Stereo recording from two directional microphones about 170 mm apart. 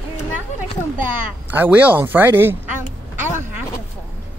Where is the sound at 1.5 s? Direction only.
10° right (ahead or behind).